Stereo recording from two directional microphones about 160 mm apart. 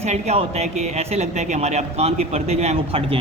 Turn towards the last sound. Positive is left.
turn(degrees=-40)  # may be behind; listen again after turning